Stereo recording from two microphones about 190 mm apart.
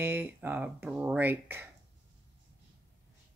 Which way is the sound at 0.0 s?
10° right (ahead or behind).